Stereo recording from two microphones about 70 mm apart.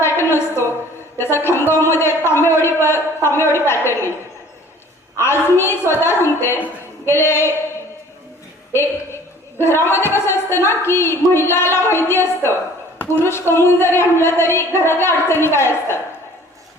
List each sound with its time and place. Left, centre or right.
0.0 s a sound: left
1.7 s a man's voice: left
5.1 s a man's voice: left
8.7 s a man's voice: left